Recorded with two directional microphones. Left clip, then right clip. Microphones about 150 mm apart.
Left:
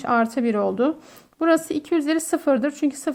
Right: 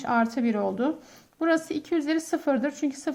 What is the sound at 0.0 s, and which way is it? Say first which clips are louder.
A woman's voice: left 4 dB; 40° left (ahead or behind).